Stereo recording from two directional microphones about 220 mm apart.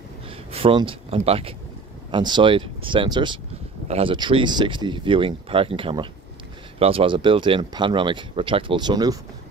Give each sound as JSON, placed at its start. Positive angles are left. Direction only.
{"t": 0.5, "sound": "speech", "side_deg": -25}